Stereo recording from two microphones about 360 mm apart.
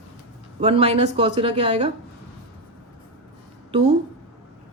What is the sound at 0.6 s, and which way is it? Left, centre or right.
Speech, centre.